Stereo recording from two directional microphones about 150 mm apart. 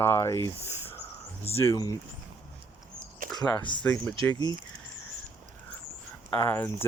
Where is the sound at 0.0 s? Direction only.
15° left (ahead or behind).